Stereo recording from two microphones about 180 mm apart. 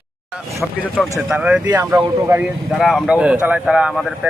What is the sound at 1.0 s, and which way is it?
Speech, centre (ahead or behind).